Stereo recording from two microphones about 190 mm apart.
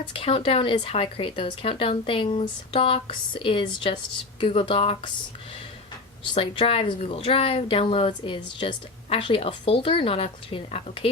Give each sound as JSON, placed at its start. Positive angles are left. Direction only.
{"t": 0.0, "sound": "speech", "side_deg": 30}
{"t": 6.3, "sound": "speech", "side_deg": 30}